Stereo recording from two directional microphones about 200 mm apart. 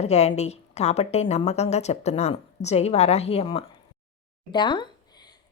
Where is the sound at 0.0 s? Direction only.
30° left (ahead or behind).